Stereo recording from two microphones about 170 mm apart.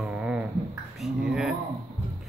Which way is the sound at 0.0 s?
5° right (ahead or behind).